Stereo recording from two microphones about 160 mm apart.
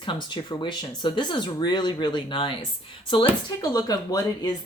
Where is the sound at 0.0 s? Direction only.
30° left (ahead or behind).